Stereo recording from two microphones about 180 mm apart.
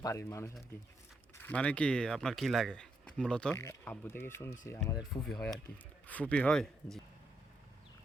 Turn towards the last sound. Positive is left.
turn(degrees=5)  # may be behind; listen again after turning